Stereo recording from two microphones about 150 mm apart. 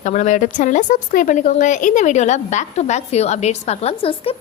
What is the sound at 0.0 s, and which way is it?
A woman's voice, 55° left (ahead or behind).